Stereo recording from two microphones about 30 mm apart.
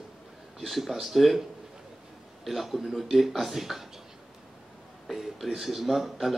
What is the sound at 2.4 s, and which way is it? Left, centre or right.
Speech, centre.